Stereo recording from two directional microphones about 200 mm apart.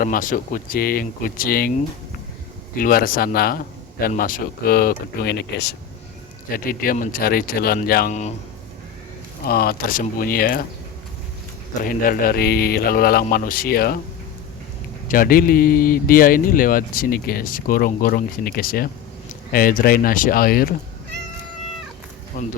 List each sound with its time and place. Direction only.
0.0 s speech: 45° left (ahead or behind)
2.7 s speech: 45° left (ahead or behind)
9.5 s speech: 50° left (ahead or behind)
11.8 s speech: 45° left (ahead or behind)
15.0 s speech: 45° left (ahead or behind)
22.3 s speech: 40° left (ahead or behind)